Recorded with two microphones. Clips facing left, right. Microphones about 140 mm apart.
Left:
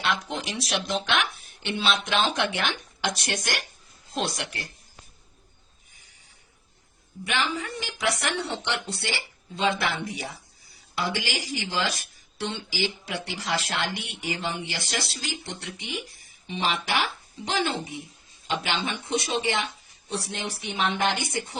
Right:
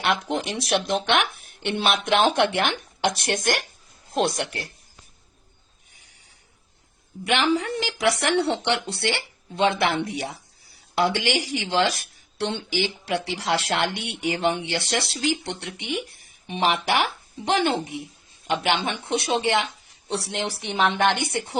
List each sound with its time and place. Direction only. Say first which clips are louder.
0.0 s speech: right 4 dB; 60° right (ahead or behind)
5.9 s a sound: right 2 dB; 70° right (ahead or behind)
7.3 s speech: right 7 dB; 80° right
20.1 s speech: right 4 dB; 80° right; by 21.6 s 65° right (ahead or behind)